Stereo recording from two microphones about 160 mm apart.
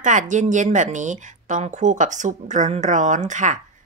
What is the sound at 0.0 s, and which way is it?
A woman's voice, 50° right (ahead or behind).